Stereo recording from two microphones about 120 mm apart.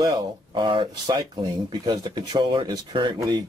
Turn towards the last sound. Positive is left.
turn(degrees=-35)  # may be behind; listen again after turning